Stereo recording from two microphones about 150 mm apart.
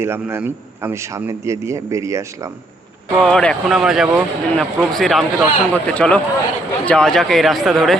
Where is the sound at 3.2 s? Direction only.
5° left (ahead or behind).